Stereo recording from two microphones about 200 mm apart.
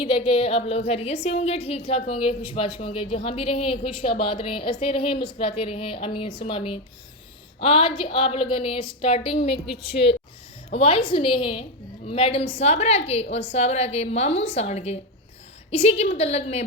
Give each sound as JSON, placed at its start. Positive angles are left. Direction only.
{"t": 0.0, "sound": "a woman's voice", "side_deg": 25}
{"t": 10.7, "sound": "a woman's voice", "side_deg": 30}